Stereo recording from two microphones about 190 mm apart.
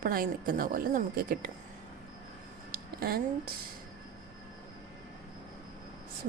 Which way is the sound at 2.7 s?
50° right (ahead or behind).